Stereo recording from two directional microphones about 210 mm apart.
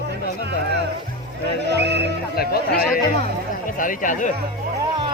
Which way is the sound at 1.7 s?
55° right (ahead or behind).